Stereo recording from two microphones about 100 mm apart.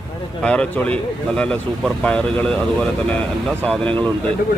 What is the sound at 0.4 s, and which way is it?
Speech, 10° left (ahead or behind).